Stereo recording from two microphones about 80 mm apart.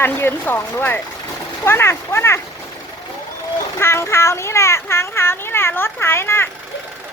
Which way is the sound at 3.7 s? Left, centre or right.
Left.